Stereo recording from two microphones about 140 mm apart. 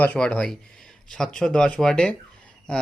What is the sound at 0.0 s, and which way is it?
A man's voice, 10° left (ahead or behind).